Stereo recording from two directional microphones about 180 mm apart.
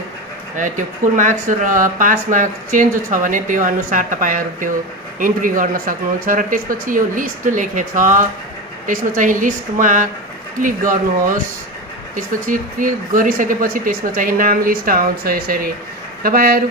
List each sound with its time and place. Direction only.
0.5 s speech: 45° right (ahead or behind)